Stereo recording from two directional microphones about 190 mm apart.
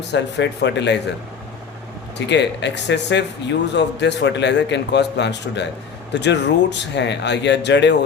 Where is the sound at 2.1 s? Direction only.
65° left (ahead or behind).